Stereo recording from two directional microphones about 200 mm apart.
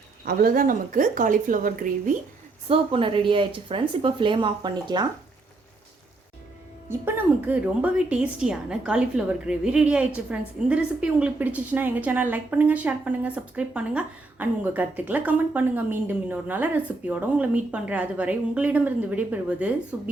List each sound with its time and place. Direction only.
0.3 s a woman's voice: 45° right (ahead or behind)
2.6 s speech: 30° right (ahead or behind)
6.8 s a woman's voice: 10° right (ahead or behind)